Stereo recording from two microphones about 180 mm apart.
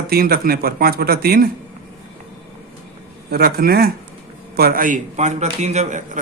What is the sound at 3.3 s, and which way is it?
A man's voice, 60° right (ahead or behind).